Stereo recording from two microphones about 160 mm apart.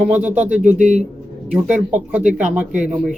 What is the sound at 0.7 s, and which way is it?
Speech, 45° right (ahead or behind).